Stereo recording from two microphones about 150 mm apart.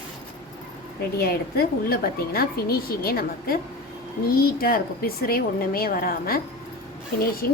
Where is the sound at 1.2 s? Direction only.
90° left.